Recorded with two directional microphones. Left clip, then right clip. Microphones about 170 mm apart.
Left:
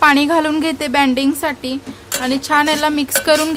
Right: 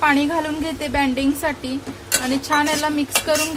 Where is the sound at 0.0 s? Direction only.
50° left (ahead or behind).